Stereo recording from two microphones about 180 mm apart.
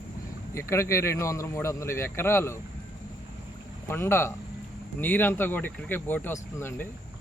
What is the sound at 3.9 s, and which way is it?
Speech, 15° left (ahead or behind).